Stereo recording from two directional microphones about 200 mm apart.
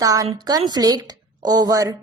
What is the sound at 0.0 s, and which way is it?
A woman's voice, 15° right (ahead or behind).